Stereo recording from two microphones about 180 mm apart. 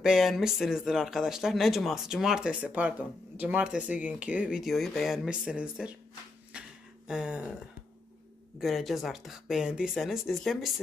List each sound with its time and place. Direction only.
0.0 s speech: centre (ahead or behind)
6.5 s a sound: 5° right (ahead or behind)
7.1 s speech: 5° right (ahead or behind)
8.5 s speech: centre (ahead or behind)